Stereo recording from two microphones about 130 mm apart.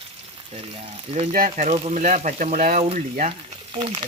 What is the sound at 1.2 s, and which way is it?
Speech, 90° right.